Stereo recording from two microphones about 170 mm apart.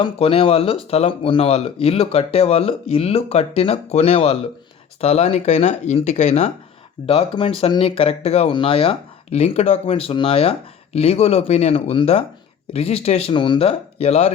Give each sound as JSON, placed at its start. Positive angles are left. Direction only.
{"t": 0.0, "sound": "speech", "side_deg": 35}